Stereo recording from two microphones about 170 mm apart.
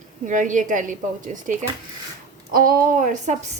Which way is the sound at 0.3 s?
50° right (ahead or behind).